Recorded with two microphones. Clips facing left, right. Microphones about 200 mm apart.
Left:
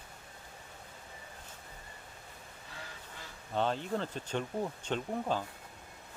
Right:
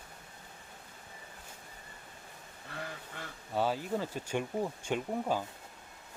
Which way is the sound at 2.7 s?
60° right (ahead or behind).